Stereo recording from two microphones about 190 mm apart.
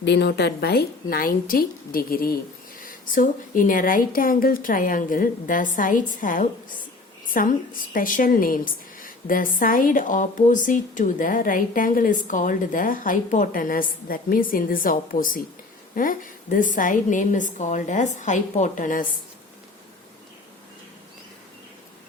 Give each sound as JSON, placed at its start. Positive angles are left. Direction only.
{"t": 0.0, "sound": "a woman's voice", "side_deg": 65}